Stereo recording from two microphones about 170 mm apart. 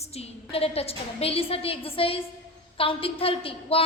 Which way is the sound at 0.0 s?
40° left (ahead or behind).